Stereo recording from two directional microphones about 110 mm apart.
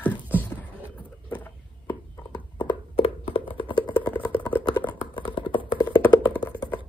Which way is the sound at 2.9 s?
60° left (ahead or behind).